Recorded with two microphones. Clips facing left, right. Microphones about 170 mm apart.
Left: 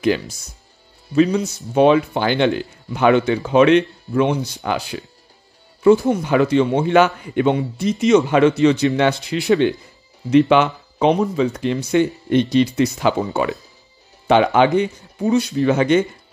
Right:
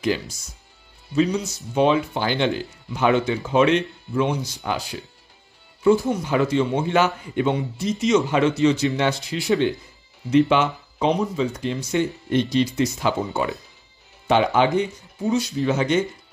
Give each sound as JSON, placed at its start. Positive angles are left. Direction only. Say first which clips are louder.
{"t": 0.0, "sound": "speech", "louder": "left 5 dB", "side_deg": 60}
{"t": 5.9, "sound": "speech", "louder": "left 5 dB", "side_deg": 70}